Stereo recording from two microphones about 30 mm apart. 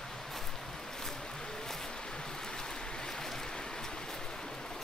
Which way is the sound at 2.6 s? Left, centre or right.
Centre.